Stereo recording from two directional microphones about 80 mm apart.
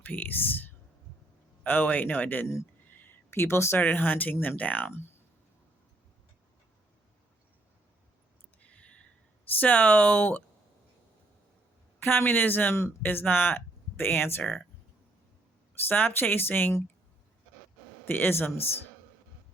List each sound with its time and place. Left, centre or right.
0.0 s speech: left
2.9 s a sound: left
3.8 s speech: left
8.6 s a sound: centre
9.6 s speech: left
11.9 s speech: left
15.9 s speech: left
18.0 s speech: left